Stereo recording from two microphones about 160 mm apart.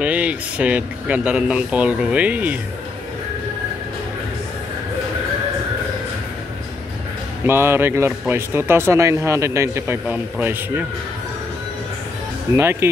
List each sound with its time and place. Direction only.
0.0 s speech: 10° right (ahead or behind)
7.4 s speech: 15° right (ahead or behind)